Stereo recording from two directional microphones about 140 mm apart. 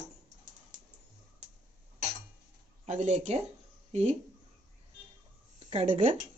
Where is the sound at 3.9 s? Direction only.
50° right (ahead or behind).